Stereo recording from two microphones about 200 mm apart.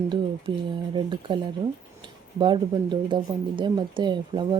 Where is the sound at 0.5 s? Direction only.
20° right (ahead or behind).